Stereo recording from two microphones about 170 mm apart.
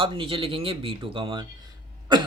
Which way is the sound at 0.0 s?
30° right (ahead or behind).